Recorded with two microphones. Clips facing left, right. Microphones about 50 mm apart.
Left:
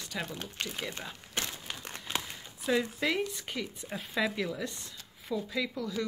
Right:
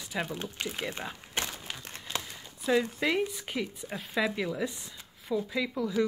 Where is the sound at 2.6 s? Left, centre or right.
Centre.